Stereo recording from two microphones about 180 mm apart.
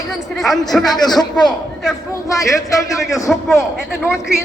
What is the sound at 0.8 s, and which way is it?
A man's voice, 20° left (ahead or behind).